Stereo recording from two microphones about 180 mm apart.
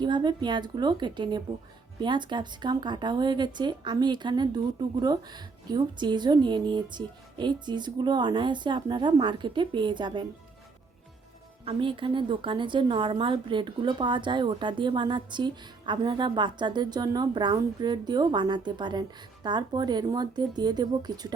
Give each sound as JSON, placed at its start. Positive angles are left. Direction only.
{"t": 0.0, "sound": "a woman's voice", "side_deg": -25}
{"t": 11.6, "sound": "a woman's voice", "side_deg": -30}